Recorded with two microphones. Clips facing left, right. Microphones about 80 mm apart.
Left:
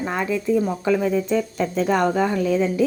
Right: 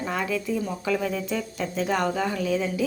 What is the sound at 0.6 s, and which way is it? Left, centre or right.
Speech, left.